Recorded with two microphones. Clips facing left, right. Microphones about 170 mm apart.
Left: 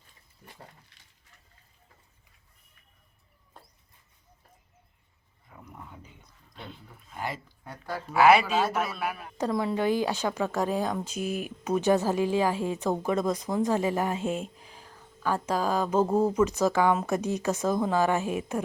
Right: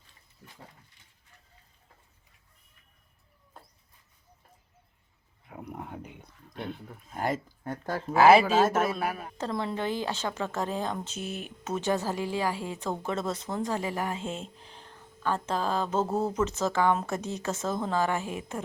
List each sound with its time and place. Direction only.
1.0 s a sound: 90° left
5.5 s speech: 70° right (ahead or behind); by 8.0 s 50° right (ahead or behind)
8.2 s speech: 30° right (ahead or behind)
8.5 s a man's voice: 45° right (ahead or behind)
9.4 s speech: 10° left (ahead or behind)